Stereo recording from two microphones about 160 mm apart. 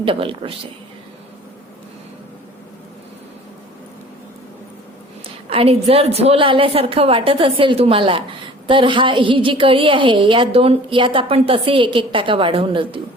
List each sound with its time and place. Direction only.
0.0 s a woman's voice: 35° right (ahead or behind)
5.5 s a woman's voice: 40° right (ahead or behind)